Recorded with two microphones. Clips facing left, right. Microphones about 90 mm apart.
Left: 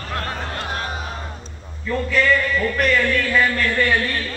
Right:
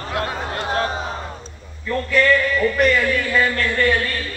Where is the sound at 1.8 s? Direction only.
Centre (ahead or behind).